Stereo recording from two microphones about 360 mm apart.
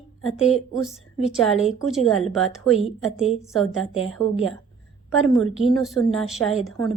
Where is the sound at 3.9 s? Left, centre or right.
Centre.